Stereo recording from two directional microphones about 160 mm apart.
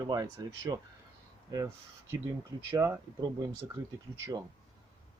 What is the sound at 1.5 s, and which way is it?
Speech, 25° right (ahead or behind).